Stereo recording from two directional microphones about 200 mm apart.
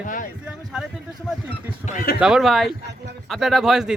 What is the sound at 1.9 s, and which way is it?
Speech, 45° left (ahead or behind).